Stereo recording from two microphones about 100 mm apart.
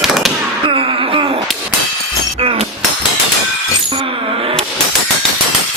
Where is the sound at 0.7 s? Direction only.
60° right (ahead or behind).